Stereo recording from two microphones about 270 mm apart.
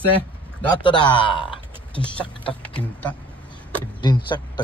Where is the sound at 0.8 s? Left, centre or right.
Centre.